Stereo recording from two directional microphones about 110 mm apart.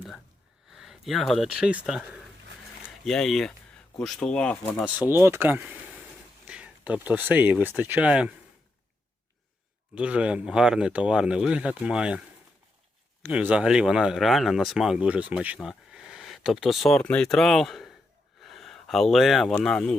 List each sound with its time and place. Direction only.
0.7 s speech: 5° right (ahead or behind)
4.9 s speech: 20° right (ahead or behind)
9.9 s speech: 10° right (ahead or behind)
13.2 s speech: 10° right (ahead or behind)
18.3 s a sound: centre (ahead or behind)
19.6 s speech: 5° left (ahead or behind)